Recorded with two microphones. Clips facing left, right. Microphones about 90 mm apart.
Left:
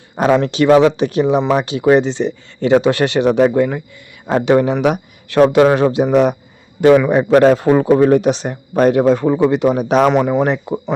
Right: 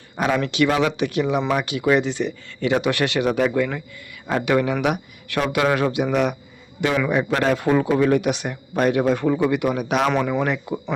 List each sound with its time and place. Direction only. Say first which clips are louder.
0.2 s speech: left 7 dB; 35° left (ahead or behind)
10.1 s speech: left 7 dB; 20° left (ahead or behind)